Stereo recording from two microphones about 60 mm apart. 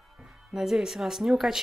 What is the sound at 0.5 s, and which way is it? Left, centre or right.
A woman's voice, centre.